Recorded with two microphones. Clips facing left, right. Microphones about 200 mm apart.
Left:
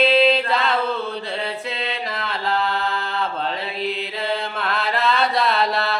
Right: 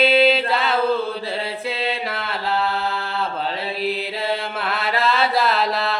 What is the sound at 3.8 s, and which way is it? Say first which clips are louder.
Mantra: right 2 dB; 5° right (ahead or behind).